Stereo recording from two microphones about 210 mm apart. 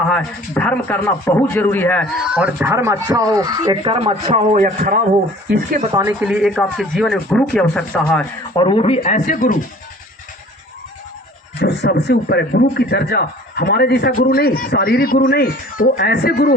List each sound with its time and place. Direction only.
0.1 s speech: 5° left (ahead or behind)
2.2 s speech: 5° right (ahead or behind); by 4.4 s 30° right (ahead or behind)
4.5 s a man's voice: 40° right (ahead or behind)
5.8 s a woman's voice: 25° right (ahead or behind)
6.1 s speech: 5° right (ahead or behind)
8.5 s speech: 25° left (ahead or behind)
11.6 s speech: 50° left (ahead or behind)